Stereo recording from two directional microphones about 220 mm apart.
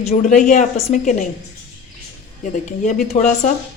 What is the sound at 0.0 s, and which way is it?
A woman's voice, 30° left (ahead or behind).